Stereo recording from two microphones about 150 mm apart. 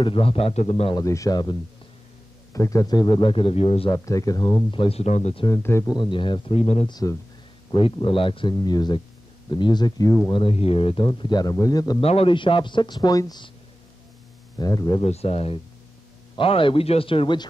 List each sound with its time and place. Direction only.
0.0 s a man's voice: 35° left (ahead or behind)
0.9 s a man's voice: 20° left (ahead or behind); by 3.9 s 40° left (ahead or behind)
3.9 s speech: 20° left (ahead or behind)
4.6 s a man's voice: 35° left (ahead or behind)
5.6 s a man's voice: 15° left (ahead or behind)
5.9 s a man's voice: 35° left (ahead or behind)
6.9 s speech: 25° left (ahead or behind)
7.7 s a man's voice: 35° left (ahead or behind)
10.3 s a man's voice: 40° left (ahead or behind); by 12.0 s 25° left (ahead or behind)
12.0 s a man's voice: 40° left (ahead or behind); by 13.5 s 25° left (ahead or behind)
14.6 s speech: 25° left (ahead or behind)
15.0 s a man's voice: 45° left (ahead or behind)